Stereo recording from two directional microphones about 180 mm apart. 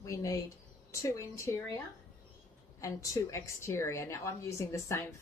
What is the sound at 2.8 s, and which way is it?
A woman's voice, 15° left (ahead or behind).